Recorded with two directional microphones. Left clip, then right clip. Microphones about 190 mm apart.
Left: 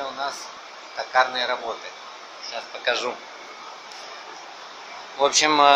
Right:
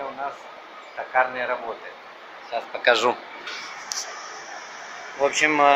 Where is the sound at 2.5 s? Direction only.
40° right (ahead or behind).